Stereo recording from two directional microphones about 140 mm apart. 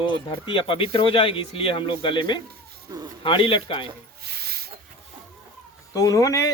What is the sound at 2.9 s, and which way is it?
Speech, 25° right (ahead or behind).